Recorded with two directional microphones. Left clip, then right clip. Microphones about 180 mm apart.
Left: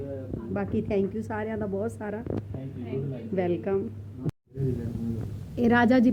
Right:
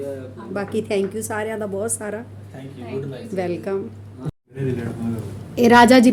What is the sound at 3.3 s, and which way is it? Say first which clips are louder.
Speech: right 3 dB; 15° right (ahead or behind).